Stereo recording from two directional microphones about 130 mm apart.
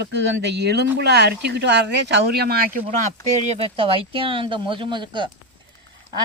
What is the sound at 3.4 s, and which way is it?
Speech, 50° right (ahead or behind).